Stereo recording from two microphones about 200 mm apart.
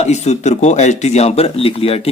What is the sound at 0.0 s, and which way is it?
Speech, 35° left (ahead or behind).